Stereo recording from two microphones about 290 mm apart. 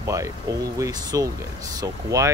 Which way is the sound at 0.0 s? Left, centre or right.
Centre.